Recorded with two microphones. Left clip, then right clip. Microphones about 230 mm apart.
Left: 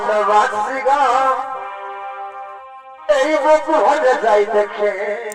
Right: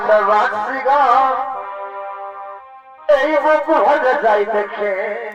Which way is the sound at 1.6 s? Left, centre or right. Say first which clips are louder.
Right 1 dB; left.